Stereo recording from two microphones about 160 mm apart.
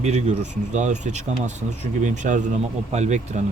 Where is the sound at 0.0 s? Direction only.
45° right (ahead or behind).